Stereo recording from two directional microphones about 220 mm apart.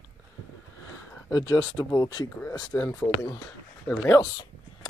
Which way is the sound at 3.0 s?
20° left (ahead or behind).